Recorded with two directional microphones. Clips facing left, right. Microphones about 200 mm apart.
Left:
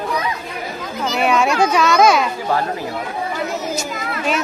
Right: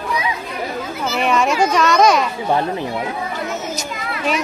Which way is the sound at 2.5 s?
20° right (ahead or behind).